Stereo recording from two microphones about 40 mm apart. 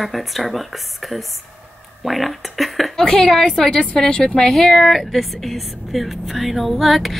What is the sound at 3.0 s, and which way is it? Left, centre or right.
A woman's voice, centre.